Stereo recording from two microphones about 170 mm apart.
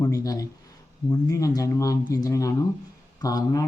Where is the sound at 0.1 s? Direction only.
20° left (ahead or behind).